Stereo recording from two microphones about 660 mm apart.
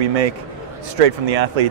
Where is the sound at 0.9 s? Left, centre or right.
Right.